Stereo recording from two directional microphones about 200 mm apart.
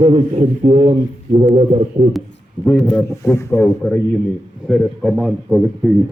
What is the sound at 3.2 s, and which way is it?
A man's voice, 15° left (ahead or behind).